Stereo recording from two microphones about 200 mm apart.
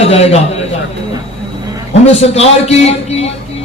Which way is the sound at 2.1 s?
30° left (ahead or behind).